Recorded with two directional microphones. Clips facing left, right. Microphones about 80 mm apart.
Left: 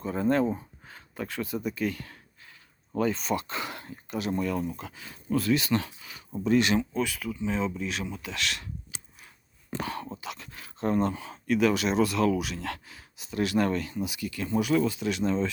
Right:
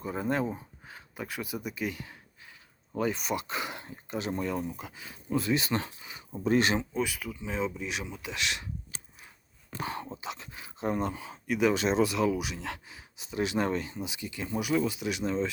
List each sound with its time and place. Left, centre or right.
0.0 s speech: centre
5.3 s speech: right
6.4 s speech: right
6.9 s speech: centre
9.8 s speech: right
11.7 s speech: right; by 15.4 s centre